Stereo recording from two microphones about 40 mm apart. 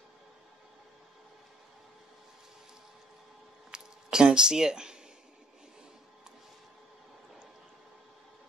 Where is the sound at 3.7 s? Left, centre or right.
Centre.